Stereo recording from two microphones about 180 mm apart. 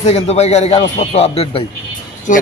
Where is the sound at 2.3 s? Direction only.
45° left (ahead or behind).